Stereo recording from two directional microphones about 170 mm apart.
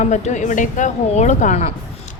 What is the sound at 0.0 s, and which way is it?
A woman's voice, 45° left (ahead or behind).